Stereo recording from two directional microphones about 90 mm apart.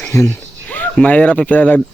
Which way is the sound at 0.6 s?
15° left (ahead or behind).